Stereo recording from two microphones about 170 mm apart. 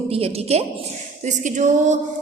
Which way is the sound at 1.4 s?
45° right (ahead or behind).